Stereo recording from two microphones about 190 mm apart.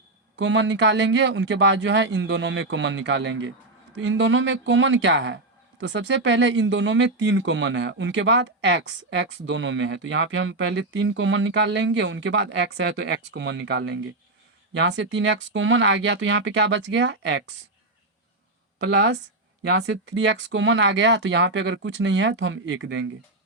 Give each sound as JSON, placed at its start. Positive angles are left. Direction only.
{"t": 0.3, "sound": "speech", "side_deg": -75}
{"t": 19.6, "sound": "speech", "side_deg": -75}